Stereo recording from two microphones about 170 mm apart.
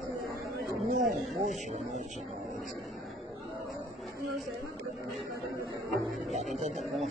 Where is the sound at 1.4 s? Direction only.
40° right (ahead or behind).